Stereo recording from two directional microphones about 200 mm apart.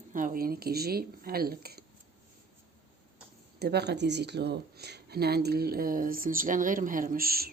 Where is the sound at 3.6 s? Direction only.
55° right (ahead or behind).